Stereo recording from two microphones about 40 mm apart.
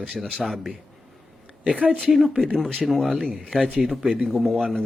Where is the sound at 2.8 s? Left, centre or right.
Centre.